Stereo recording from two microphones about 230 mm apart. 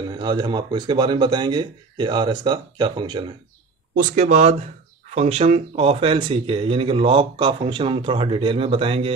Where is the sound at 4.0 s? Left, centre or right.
Right.